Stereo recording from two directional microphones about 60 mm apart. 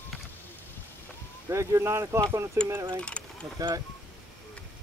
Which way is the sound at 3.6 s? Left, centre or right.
Right.